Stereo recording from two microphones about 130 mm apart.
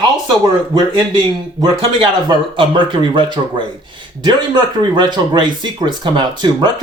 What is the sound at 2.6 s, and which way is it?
Speech, 40° right (ahead or behind).